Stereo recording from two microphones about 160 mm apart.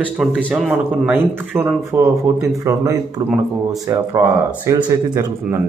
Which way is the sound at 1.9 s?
15° right (ahead or behind).